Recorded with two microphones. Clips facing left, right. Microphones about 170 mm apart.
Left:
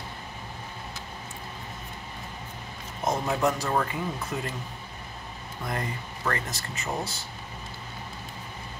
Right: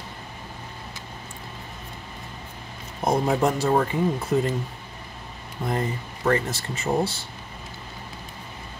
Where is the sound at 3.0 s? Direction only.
35° right (ahead or behind).